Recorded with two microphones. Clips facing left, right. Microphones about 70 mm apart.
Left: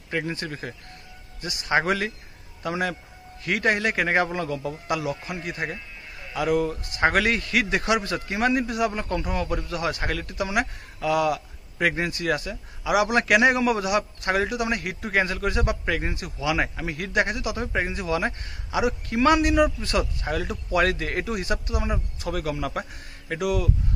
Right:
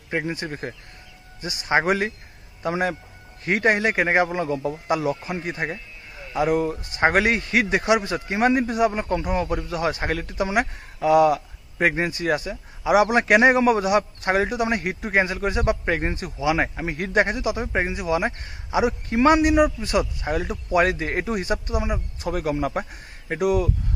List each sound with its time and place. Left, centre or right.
0.1 s speech: right